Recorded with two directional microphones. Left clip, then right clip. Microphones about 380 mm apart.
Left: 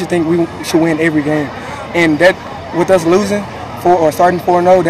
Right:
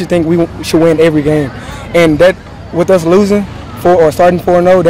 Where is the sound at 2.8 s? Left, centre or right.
Right.